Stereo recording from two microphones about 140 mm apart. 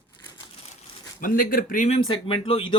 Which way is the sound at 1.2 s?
85° left.